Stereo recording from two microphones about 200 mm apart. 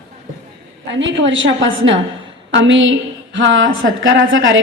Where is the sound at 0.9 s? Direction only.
65° right (ahead or behind).